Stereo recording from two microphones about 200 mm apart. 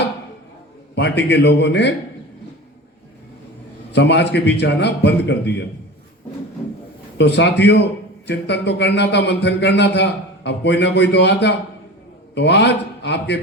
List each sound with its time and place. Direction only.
0.9 s a man's voice: 60° left (ahead or behind)
3.9 s a man's voice: 60° left (ahead or behind)
7.2 s a man's voice: 60° left (ahead or behind)